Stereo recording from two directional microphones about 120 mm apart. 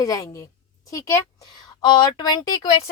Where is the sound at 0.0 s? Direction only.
30° left (ahead or behind).